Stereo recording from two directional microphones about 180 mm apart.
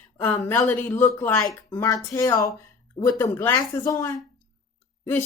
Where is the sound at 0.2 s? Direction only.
10° left (ahead or behind).